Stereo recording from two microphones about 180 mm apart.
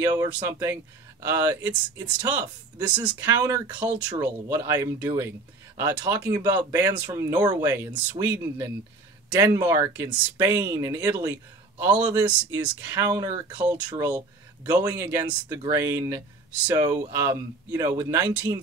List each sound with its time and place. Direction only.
0.0 s speech: 20° right (ahead or behind)
3.3 s speech: 20° right (ahead or behind)
13.6 s speech: 5° right (ahead or behind)
13.8 s speech: 20° right (ahead or behind)